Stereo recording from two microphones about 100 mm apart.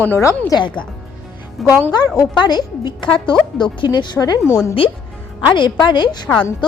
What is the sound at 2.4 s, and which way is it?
A woman's voice, 45° left (ahead or behind).